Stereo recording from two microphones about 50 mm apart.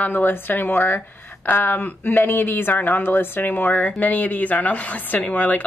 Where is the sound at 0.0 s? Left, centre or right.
Left.